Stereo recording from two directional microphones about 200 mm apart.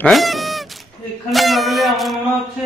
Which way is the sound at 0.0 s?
Centre (ahead or behind).